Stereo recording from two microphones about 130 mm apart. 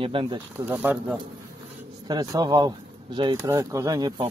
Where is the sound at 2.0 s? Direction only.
30° right (ahead or behind).